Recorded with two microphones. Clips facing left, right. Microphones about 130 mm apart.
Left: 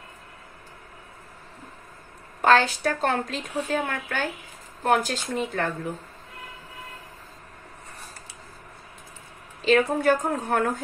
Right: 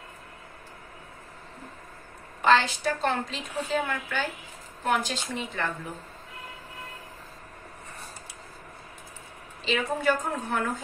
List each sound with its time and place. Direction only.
2.4 s a woman's voice: 50° left (ahead or behind)
9.7 s a woman's voice: 50° left (ahead or behind)